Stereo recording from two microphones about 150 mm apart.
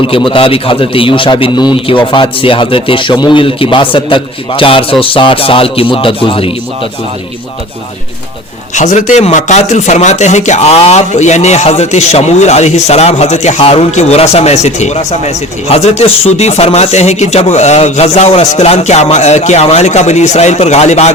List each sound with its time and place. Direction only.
0.0 s a man's voice: 35° left (ahead or behind)
8.7 s speech: 55° left (ahead or behind)